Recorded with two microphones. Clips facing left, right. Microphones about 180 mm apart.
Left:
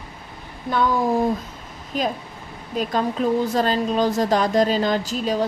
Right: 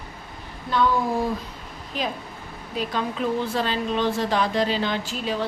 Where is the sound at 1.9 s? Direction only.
45° left (ahead or behind).